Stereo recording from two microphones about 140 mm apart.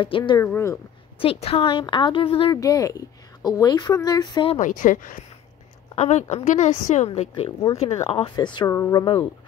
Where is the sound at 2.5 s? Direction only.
25° left (ahead or behind).